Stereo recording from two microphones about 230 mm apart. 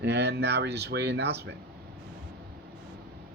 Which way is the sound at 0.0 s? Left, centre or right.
Right.